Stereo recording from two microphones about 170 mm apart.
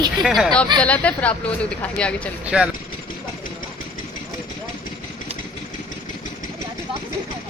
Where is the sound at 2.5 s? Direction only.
5° right (ahead or behind).